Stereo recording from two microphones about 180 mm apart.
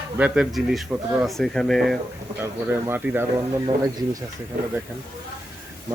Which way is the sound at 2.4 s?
10° right (ahead or behind).